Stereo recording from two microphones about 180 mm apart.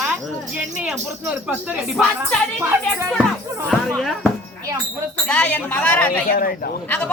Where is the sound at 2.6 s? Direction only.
15° right (ahead or behind).